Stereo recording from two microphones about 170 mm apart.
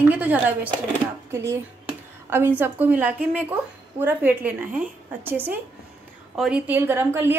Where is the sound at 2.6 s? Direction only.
10° right (ahead or behind).